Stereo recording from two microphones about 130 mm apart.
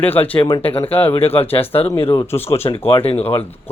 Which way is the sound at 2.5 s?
50° left (ahead or behind).